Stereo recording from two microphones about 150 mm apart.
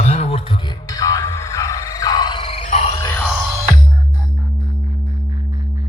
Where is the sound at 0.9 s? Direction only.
25° left (ahead or behind); by 2.8 s 45° left (ahead or behind).